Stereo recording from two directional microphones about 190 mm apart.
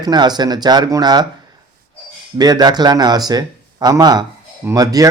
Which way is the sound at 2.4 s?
20° right (ahead or behind).